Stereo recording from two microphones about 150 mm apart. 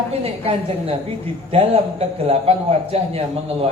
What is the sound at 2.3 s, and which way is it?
Speech, 40° right (ahead or behind).